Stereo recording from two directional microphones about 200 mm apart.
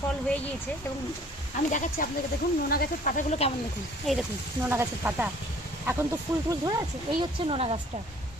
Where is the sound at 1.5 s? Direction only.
40° left (ahead or behind).